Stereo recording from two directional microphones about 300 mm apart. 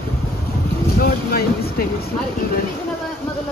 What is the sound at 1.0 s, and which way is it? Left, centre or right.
Vehicle, left.